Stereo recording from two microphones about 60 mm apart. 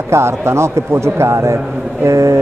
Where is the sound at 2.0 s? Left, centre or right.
Right.